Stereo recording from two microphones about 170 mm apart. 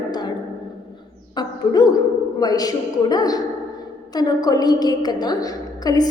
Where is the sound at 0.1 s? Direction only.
25° left (ahead or behind).